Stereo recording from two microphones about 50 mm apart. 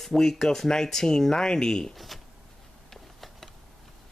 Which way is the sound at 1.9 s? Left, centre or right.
Centre.